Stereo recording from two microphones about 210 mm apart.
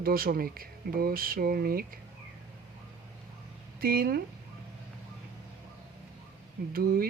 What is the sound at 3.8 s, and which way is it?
Speech, 45° right (ahead or behind).